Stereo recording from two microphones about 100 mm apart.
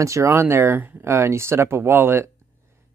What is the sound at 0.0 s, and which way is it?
Speech, 30° right (ahead or behind).